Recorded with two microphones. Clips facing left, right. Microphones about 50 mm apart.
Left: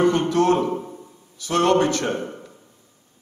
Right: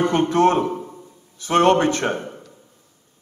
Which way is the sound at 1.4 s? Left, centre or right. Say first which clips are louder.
Right 2 dB; right.